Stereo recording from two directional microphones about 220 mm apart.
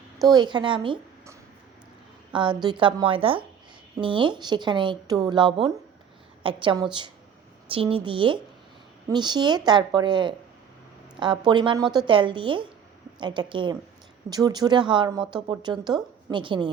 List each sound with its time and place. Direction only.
0.3 s a woman's voice: 20° right (ahead or behind)